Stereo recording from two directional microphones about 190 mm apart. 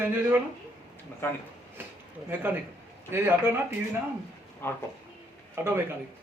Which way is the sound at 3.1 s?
10° right (ahead or behind).